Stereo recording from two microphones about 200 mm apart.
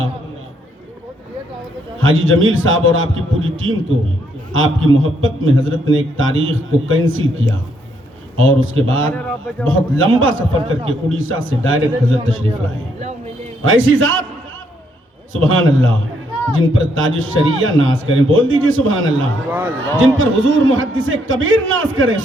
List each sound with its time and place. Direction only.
2.0 s a man's voice: 80° right
9.1 s speech: 5° left (ahead or behind)
9.6 s a man's voice: 80° right
13.6 s a man's voice: 80° right
15.3 s a man's voice: 80° right
19.5 s speech: 10° right (ahead or behind)
20.0 s a man's voice: 80° right